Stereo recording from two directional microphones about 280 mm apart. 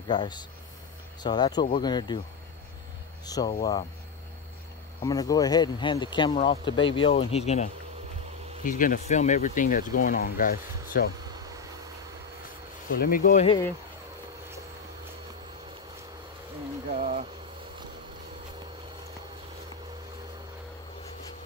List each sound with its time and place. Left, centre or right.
0.1 s speech: centre
3.3 s speech: centre
5.0 s speech: centre; by 11.1 s left
12.9 s speech: left
16.9 s a sound: right